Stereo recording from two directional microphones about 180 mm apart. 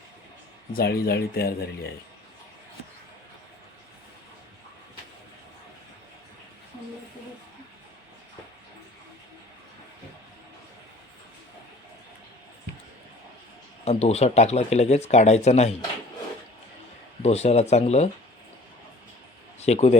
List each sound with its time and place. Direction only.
0.7 s speech: 60° left (ahead or behind)
13.8 s speech: 35° left (ahead or behind)
17.2 s speech: 35° left (ahead or behind)
19.5 s speech: 35° left (ahead or behind)